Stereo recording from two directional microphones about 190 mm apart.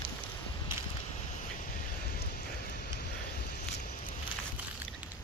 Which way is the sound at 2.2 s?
55° left (ahead or behind).